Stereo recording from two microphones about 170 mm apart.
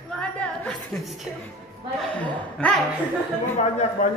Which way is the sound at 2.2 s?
5° left (ahead or behind).